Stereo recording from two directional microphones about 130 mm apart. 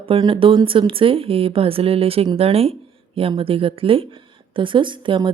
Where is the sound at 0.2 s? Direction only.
40° right (ahead or behind).